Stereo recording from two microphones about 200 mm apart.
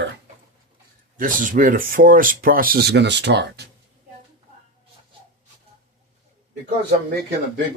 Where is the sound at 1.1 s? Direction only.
40° right (ahead or behind).